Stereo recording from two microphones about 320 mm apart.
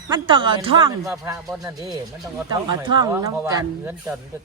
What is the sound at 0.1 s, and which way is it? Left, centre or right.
Speech, centre.